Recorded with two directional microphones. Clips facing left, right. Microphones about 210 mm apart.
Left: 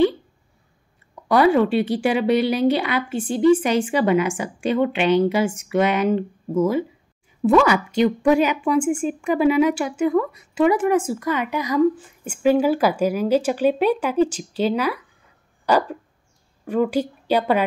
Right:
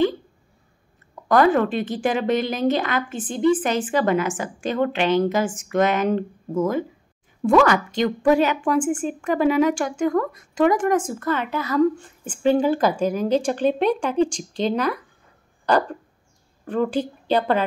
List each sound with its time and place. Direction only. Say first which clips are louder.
1.3 s a woman's voice: left 2 dB; 10° left (ahead or behind)
15.6 s a sound: left 1 dB; 10° left (ahead or behind)
16.6 s a woman's voice: left 2 dB; 10° left (ahead or behind)